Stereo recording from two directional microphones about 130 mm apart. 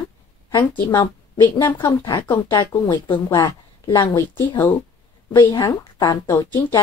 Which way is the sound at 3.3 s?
25° left (ahead or behind).